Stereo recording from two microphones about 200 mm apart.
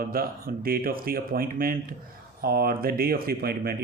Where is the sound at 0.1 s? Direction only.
45° right (ahead or behind).